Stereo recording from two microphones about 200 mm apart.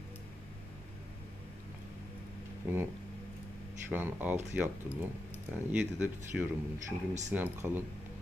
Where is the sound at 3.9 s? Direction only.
10° right (ahead or behind).